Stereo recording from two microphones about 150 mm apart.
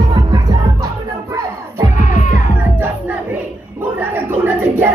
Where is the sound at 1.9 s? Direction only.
60° left (ahead or behind).